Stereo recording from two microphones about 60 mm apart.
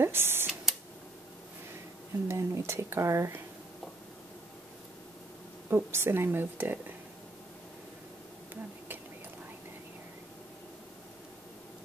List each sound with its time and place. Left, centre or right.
0.0 s speech: right
2.2 s speech: right
5.7 s a woman's voice: right